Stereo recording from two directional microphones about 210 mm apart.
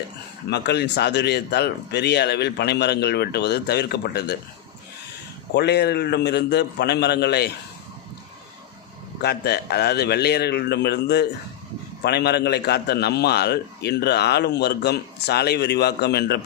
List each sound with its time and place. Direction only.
0.5 s a man's voice: 50° left (ahead or behind)
5.5 s a man's voice: 50° left (ahead or behind)
9.2 s a man's voice: 50° left (ahead or behind)